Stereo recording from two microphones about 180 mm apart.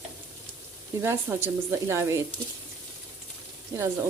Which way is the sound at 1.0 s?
15° right (ahead or behind).